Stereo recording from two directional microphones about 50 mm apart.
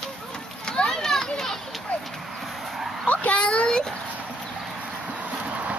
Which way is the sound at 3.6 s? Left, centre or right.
Centre.